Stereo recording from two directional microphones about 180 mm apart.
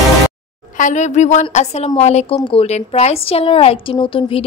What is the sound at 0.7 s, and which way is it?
A woman's voice, 45° left (ahead or behind).